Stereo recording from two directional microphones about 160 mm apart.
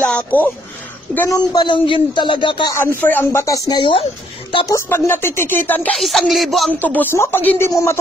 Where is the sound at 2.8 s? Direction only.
15° left (ahead or behind); by 4.7 s 30° left (ahead or behind).